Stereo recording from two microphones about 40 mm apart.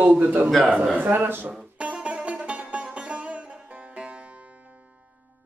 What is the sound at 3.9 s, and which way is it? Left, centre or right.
Music, right.